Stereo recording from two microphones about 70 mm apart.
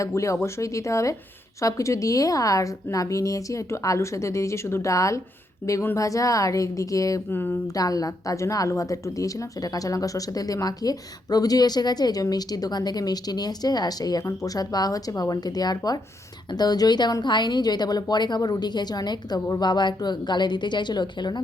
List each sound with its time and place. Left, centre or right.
0.0 s a woman's voice: left
7.3 s a sound: left
7.7 s a woman's voice: left
14.3 s a woman's voice: left